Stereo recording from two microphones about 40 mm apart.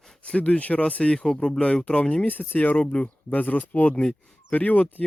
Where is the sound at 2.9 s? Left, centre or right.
Left.